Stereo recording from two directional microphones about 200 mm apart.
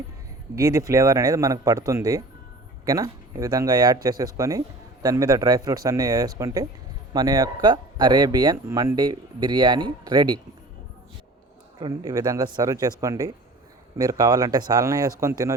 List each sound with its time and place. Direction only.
0.5 s speech: 15° right (ahead or behind)
11.8 s speech: 20° right (ahead or behind)